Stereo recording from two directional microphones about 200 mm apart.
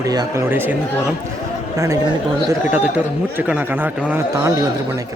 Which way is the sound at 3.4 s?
10° right (ahead or behind).